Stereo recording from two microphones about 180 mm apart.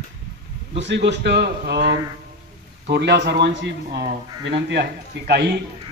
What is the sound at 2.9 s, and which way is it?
A man's voice, 70° right (ahead or behind).